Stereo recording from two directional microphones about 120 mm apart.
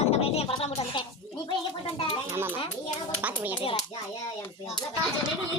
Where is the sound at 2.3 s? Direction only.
20° right (ahead or behind).